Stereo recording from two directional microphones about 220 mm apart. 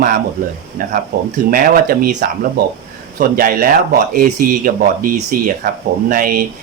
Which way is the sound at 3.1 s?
40° right (ahead or behind).